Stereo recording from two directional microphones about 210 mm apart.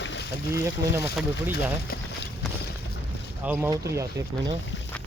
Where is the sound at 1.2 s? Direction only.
Centre (ahead or behind).